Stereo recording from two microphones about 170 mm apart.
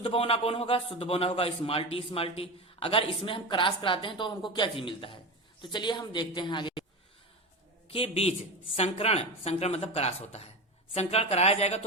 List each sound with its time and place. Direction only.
0.0 s a man's voice: 35° left (ahead or behind)
7.9 s a man's voice: 35° left (ahead or behind)